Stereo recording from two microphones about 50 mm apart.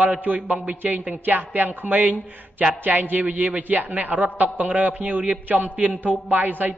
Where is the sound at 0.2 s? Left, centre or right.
Right.